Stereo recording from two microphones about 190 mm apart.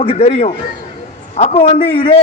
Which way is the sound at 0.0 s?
30° left (ahead or behind).